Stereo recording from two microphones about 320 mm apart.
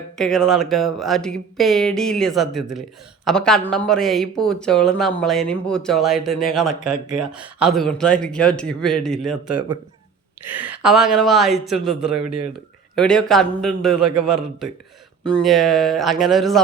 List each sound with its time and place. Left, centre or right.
0.2 s speech: centre
10.5 s speech: centre
12.1 s speech: right
13.0 s speech: centre